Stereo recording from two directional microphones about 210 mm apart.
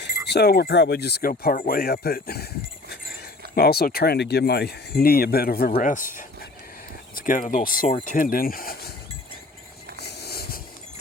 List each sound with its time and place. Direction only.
0.3 s speech: 50° left (ahead or behind)
3.5 s speech: 45° left (ahead or behind)
10.0 s a sound: 50° left (ahead or behind)